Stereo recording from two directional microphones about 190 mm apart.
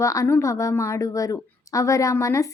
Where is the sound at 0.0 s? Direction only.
15° left (ahead or behind).